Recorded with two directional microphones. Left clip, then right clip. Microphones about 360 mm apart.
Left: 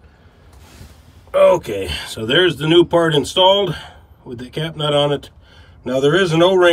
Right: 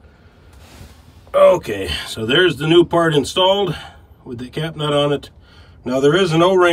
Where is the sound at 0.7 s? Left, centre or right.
Centre.